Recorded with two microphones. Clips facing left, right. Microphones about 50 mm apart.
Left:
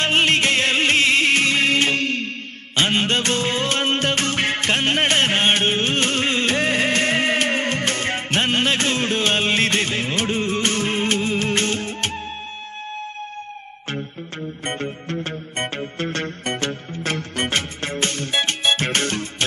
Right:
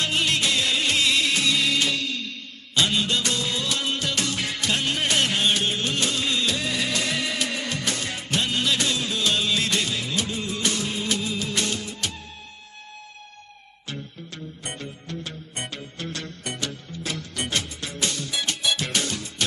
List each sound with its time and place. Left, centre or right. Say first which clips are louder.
0.0 s music: left 6 dB; left
14.6 s music: left 11 dB; left